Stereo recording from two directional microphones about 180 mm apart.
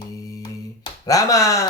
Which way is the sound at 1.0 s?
20° left (ahead or behind).